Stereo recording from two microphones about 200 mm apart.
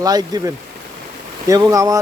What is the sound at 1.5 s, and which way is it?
Speech, 15° right (ahead or behind).